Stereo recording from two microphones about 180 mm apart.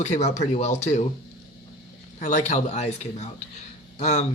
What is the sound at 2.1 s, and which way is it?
Speech, 40° left (ahead or behind).